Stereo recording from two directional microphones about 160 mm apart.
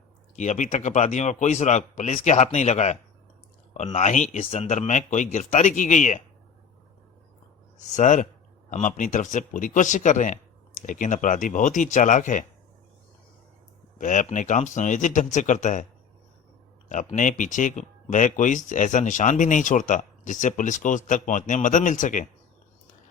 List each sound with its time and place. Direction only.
0.3 s speech: 50° left (ahead or behind)
7.9 s speech: 50° left (ahead or behind)
14.0 s speech: 50° left (ahead or behind)
16.9 s speech: 50° left (ahead or behind)